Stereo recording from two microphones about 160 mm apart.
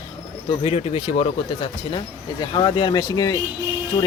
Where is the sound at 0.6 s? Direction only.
40° left (ahead or behind).